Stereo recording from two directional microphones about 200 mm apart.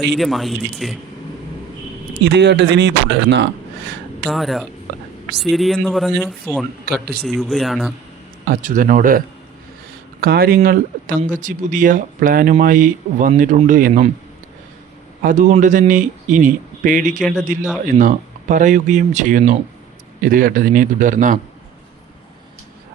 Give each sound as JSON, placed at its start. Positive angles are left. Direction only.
{"t": 0.1, "sound": "speech", "side_deg": 0}
{"t": 2.2, "sound": "speech", "side_deg": -60}
{"t": 4.3, "sound": "speech", "side_deg": 0}
{"t": 6.9, "sound": "a man's voice", "side_deg": -50}
{"t": 7.3, "sound": "speech", "side_deg": 0}
{"t": 8.4, "sound": "a man's voice", "side_deg": -40}
{"t": 15.2, "sound": "a man's voice", "side_deg": -40}